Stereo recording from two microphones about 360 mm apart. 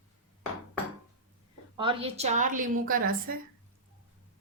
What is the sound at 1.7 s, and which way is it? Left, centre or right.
A woman's voice, centre.